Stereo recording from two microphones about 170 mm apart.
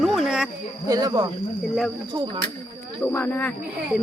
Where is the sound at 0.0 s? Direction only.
Centre (ahead or behind).